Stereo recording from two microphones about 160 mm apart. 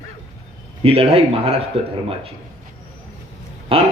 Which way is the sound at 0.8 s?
40° right (ahead or behind).